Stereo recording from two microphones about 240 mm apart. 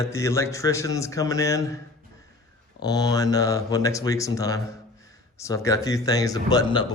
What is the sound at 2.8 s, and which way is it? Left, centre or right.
Speech, centre.